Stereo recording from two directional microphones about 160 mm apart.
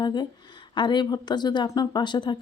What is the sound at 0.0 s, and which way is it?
A woman's voice, 25° left (ahead or behind).